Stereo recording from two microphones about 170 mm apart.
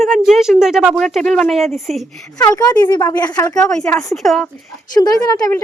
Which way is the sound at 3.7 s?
5° left (ahead or behind).